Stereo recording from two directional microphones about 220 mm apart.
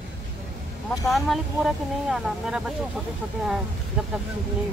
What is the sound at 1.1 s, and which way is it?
Speech, centre (ahead or behind).